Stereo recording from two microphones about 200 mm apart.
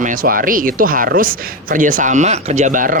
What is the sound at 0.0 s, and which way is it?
Speech, 45° right (ahead or behind).